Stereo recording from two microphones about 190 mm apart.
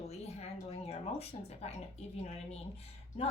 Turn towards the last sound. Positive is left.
turn(degrees=30)  # may be behind; listen again after turning